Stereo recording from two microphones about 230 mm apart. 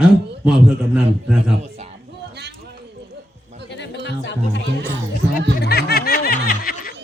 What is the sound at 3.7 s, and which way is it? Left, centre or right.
Music, left.